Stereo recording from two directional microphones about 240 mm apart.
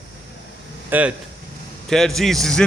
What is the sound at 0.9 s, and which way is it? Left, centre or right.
Speech, centre.